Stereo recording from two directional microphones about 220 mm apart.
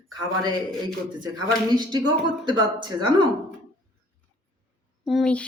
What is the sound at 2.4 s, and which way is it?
Speech, 20° right (ahead or behind).